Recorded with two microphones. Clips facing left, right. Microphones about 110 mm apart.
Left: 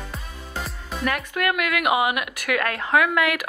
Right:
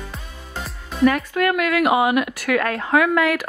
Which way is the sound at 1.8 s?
10° left (ahead or behind).